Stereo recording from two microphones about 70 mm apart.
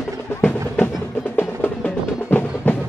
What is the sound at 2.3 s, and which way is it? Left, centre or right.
Music, left.